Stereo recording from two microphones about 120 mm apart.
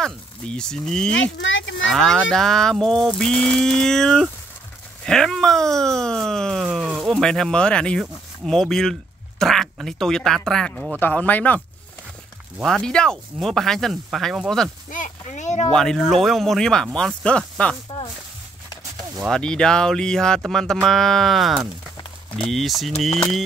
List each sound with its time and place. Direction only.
0.0 s speech: 5° left (ahead or behind)
11.0 s speech: 15° left (ahead or behind)
12.6 s speech: 5° left (ahead or behind)
14.9 s speech: 90° left
15.7 s speech: 5° left (ahead or behind)
19.2 s speech: 5° left (ahead or behind)